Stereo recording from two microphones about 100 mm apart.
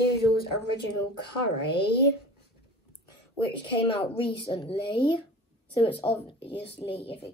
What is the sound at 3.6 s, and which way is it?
A woman's voice, 55° left (ahead or behind).